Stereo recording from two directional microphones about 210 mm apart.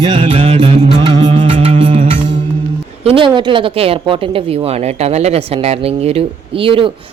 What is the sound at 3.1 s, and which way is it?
A woman's voice, 25° right (ahead or behind).